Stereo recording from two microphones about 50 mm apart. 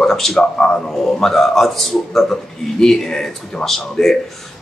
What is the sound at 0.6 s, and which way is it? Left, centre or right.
A man's voice, centre.